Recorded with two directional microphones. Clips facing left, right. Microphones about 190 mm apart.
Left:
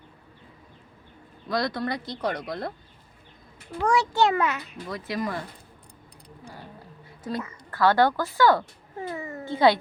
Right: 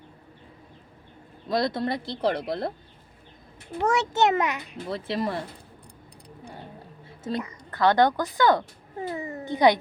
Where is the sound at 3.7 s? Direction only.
25° right (ahead or behind).